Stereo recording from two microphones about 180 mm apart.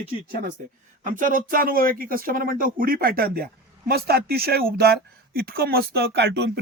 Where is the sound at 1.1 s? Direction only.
50° right (ahead or behind); by 6.6 s 70° right (ahead or behind).